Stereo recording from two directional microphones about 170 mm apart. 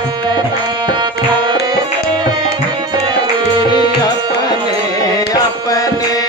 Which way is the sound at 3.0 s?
30° right (ahead or behind).